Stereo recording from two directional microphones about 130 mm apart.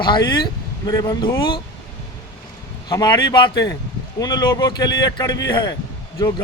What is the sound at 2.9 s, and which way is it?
A man's voice, 30° left (ahead or behind).